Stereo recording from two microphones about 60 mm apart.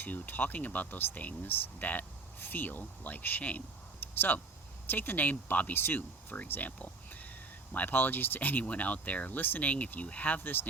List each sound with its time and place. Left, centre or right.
0.0 s speech: left
4.0 s a sound: left
4.9 s speech: left